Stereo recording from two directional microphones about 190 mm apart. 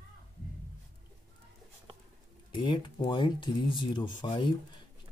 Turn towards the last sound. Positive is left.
turn(degrees=25)  # may be behind; listen again after turning